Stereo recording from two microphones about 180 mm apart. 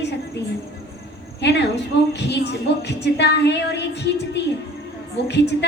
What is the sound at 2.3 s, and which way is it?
Speech, 70° left (ahead or behind).